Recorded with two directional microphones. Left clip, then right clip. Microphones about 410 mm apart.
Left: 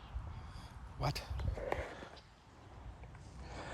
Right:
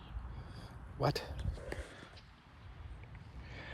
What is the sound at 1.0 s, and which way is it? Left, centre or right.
Speech, centre.